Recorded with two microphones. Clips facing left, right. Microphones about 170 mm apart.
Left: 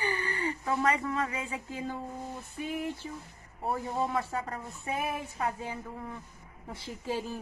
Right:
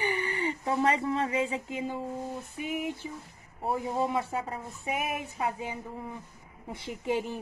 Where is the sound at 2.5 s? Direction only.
15° right (ahead or behind).